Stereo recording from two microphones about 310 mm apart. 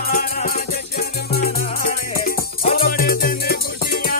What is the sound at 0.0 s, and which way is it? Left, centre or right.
Music, left.